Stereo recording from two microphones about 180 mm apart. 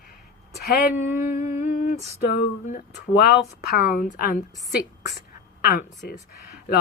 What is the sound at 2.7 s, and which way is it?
Speech, 60° left (ahead or behind).